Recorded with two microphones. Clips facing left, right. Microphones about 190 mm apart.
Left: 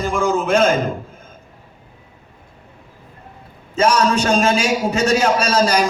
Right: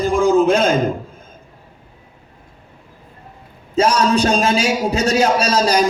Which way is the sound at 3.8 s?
35° right (ahead or behind).